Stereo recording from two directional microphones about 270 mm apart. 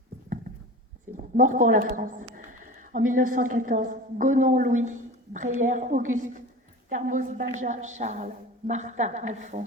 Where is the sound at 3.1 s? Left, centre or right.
Right.